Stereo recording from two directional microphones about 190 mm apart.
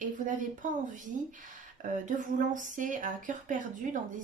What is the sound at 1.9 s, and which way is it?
Speech, 40° right (ahead or behind).